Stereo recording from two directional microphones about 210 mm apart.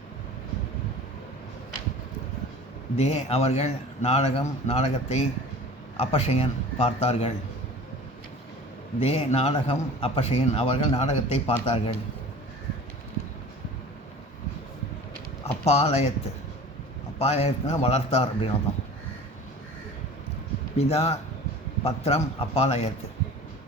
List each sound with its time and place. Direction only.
3.0 s a man's voice: 30° left (ahead or behind)
9.0 s a man's voice: 30° left (ahead or behind)
15.6 s a man's voice: 30° left (ahead or behind)
20.7 s a man's voice: 30° left (ahead or behind)